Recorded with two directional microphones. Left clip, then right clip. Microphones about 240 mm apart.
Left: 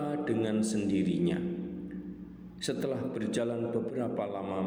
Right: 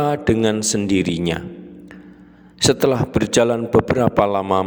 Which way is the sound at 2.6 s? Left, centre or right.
Right.